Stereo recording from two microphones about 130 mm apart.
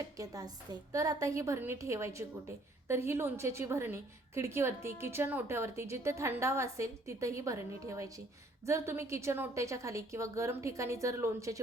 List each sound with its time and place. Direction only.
0.2 s a woman's voice: 30° right (ahead or behind)